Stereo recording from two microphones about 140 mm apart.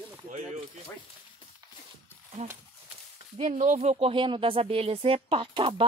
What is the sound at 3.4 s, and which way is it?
Speech, 60° right (ahead or behind).